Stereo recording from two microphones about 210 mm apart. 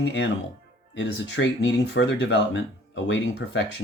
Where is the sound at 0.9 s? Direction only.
60° left (ahead or behind).